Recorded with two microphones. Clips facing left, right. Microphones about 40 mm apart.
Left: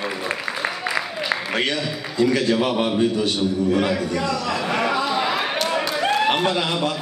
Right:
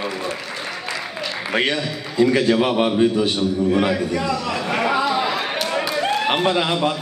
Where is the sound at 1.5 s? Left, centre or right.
Centre.